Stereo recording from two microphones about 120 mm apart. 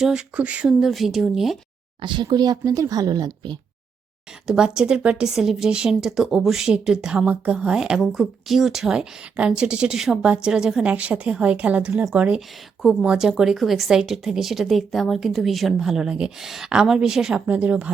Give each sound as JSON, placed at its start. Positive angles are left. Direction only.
{"t": 0.0, "sound": "a woman's voice", "side_deg": -5}
{"t": 2.0, "sound": "speech", "side_deg": -40}
{"t": 4.4, "sound": "a woman's voice", "side_deg": -5}